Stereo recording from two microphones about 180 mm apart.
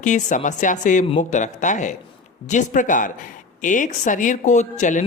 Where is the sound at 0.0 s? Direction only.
45° left (ahead or behind).